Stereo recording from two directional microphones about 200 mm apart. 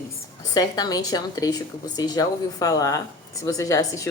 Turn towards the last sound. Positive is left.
turn(degrees=15)  # may be behind; listen again after turning